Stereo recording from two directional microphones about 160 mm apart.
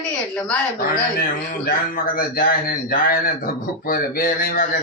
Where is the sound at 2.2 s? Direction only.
65° left (ahead or behind).